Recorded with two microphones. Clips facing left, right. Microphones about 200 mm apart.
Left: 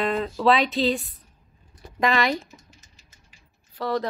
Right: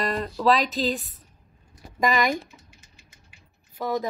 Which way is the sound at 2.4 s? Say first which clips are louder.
Left 2 dB; 40° left (ahead or behind).